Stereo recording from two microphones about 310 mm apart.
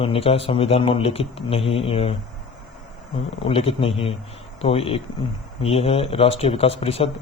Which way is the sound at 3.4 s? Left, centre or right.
Centre.